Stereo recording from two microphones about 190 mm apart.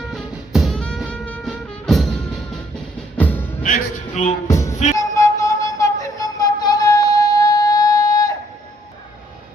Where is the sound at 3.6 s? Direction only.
40° left (ahead or behind).